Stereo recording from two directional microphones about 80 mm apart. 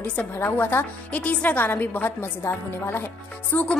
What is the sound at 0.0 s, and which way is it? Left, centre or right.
A woman's voice, centre.